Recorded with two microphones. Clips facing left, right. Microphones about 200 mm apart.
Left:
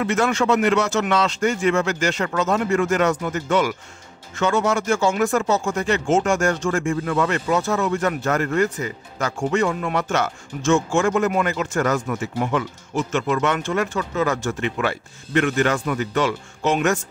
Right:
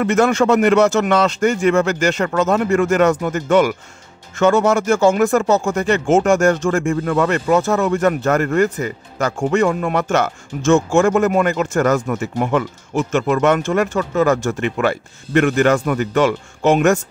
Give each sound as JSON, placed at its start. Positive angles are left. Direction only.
{"t": 0.0, "sound": "speech", "side_deg": -45}